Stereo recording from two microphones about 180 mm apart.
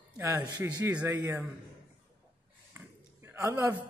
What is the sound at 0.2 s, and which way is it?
A man's voice, 15° right (ahead or behind).